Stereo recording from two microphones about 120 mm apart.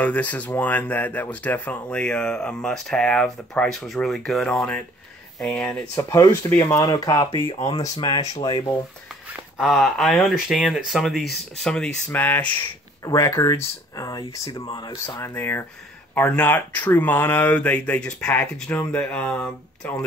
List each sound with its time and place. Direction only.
0.0 s speech: 10° left (ahead or behind)
5.9 s speech: 25° left (ahead or behind)
9.6 s speech: centre (ahead or behind)
13.0 s speech: 25° left (ahead or behind)
15.0 s speech: 20° left (ahead or behind)